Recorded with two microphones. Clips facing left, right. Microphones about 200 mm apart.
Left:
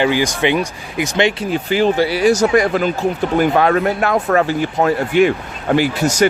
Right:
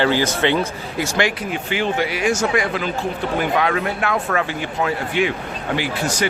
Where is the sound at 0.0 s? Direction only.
15° left (ahead or behind).